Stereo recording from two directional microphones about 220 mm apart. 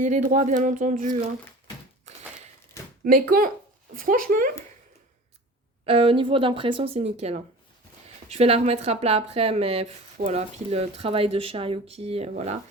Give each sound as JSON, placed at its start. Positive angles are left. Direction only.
{"t": 0.0, "sound": "speech", "side_deg": -35}
{"t": 2.1, "sound": "crushing", "side_deg": -30}
{"t": 3.0, "sound": "speech", "side_deg": -40}
{"t": 5.8, "sound": "speech", "side_deg": -25}